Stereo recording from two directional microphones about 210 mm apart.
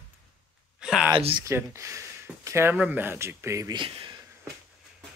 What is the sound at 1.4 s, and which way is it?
Speech, 15° right (ahead or behind).